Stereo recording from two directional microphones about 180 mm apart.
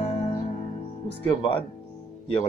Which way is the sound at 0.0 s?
40° left (ahead or behind).